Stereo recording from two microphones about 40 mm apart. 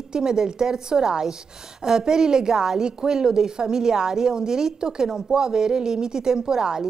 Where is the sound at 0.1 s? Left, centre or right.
Centre.